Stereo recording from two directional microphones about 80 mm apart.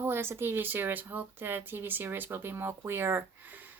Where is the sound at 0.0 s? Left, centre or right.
Right.